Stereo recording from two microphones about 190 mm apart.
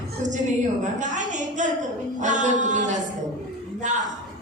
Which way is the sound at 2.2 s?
40° right (ahead or behind).